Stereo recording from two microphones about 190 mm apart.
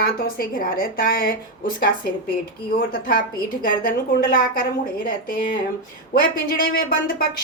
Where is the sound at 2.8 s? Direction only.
50° left (ahead or behind).